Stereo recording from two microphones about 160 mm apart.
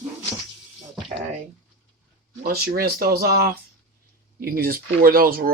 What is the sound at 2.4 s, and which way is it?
Speech, 70° right (ahead or behind).